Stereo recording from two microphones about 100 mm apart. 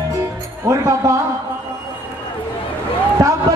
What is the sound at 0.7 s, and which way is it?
Music, 30° right (ahead or behind).